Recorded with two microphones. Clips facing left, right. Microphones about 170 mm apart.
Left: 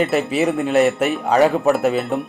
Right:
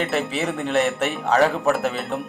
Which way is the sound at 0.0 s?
Centre (ahead or behind).